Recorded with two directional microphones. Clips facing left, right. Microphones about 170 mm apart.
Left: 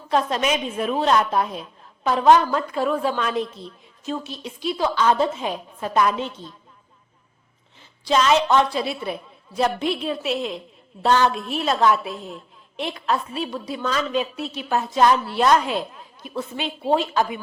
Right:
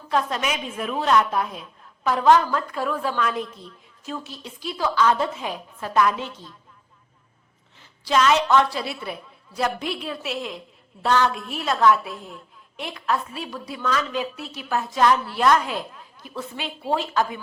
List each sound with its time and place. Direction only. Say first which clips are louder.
0.1 s a woman's voice: left 3 dB; 25° left (ahead or behind)
7.8 s a woman's voice: left 1 dB; 20° left (ahead or behind)